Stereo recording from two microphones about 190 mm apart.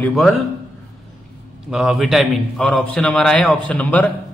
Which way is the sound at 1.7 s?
5° right (ahead or behind).